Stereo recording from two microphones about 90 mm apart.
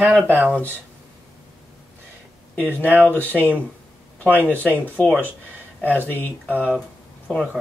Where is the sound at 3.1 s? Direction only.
15° left (ahead or behind).